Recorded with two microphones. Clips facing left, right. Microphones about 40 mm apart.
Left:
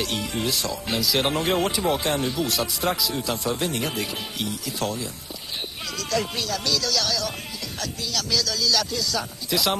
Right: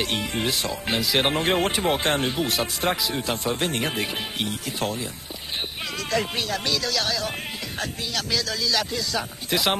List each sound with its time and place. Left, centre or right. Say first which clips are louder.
0.0 s speech: right 1 dB; right